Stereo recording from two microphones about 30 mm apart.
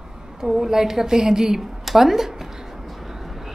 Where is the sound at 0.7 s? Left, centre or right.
Centre.